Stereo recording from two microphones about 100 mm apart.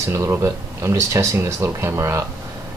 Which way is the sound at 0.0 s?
30° right (ahead or behind).